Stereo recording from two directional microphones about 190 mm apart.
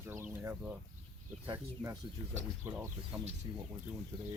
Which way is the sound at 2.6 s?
15° right (ahead or behind).